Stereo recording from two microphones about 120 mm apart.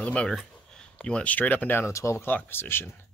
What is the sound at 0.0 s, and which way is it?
Speech, 10° left (ahead or behind).